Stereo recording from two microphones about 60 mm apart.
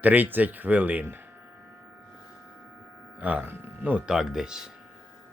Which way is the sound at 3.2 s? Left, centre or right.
Right.